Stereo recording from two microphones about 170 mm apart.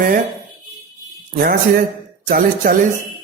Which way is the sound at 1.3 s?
60° right (ahead or behind).